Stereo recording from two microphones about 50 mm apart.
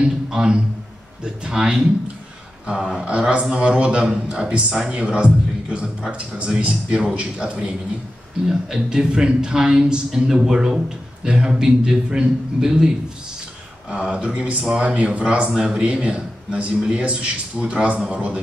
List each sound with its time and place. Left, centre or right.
0.0 s a sound: centre
1.2 s a woman's voice: centre
8.5 s a woman's voice: centre
14.1 s a man's voice: centre